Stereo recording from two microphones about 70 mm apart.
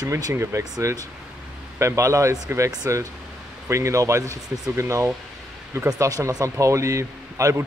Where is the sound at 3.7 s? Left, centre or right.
Right.